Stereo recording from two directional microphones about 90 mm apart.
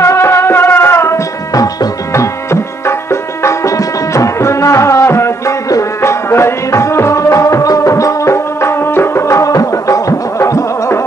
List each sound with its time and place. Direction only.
0.0 s music: 30° left (ahead or behind)